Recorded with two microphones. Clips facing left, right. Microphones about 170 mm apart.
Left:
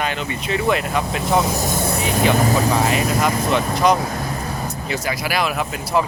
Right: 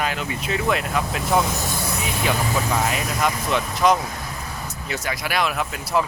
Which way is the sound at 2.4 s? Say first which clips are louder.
Left 5 dB; 35° left (ahead or behind).